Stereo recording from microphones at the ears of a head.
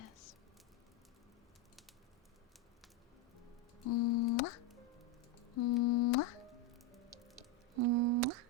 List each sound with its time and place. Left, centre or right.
3.4 s music: left
7.8 s busy signal: right